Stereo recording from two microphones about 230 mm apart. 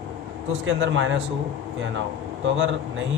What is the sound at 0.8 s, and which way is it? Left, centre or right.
Speech, right.